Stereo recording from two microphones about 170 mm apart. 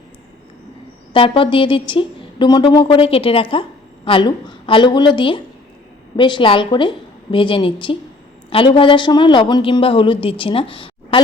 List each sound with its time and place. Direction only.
1.1 s a woman's voice: 30° left (ahead or behind)